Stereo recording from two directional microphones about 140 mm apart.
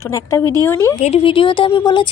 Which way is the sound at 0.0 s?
20° left (ahead or behind).